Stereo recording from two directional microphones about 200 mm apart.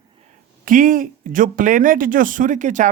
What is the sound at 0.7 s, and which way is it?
Speech, 45° right (ahead or behind).